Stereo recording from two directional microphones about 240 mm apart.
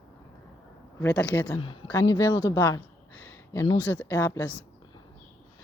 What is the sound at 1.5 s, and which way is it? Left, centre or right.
Speech, centre.